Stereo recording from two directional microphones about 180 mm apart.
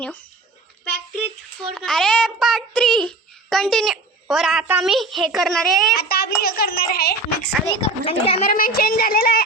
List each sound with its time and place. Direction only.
1.6 s a child's voice: centre (ahead or behind)
6.0 s a child's voice: 60° left (ahead or behind)
7.8 s a child's voice: 35° left (ahead or behind)
8.4 s a child's voice: 55° left (ahead or behind)